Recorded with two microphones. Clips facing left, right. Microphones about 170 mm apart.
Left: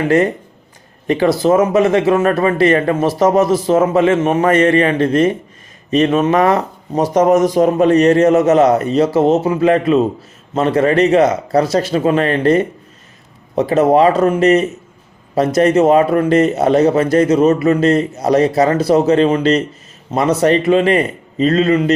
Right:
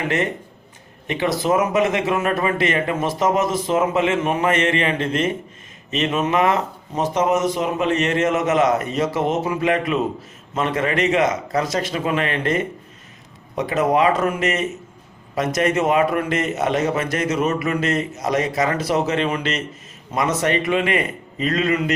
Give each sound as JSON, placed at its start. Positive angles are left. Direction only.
{"t": 1.0, "sound": "speech", "side_deg": 35}